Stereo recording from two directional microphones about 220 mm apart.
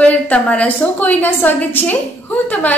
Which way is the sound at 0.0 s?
5° left (ahead or behind).